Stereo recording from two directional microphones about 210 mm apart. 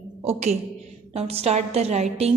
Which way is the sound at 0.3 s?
30° right (ahead or behind).